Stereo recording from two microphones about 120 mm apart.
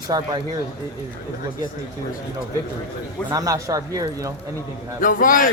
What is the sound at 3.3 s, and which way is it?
Speech, 30° right (ahead or behind).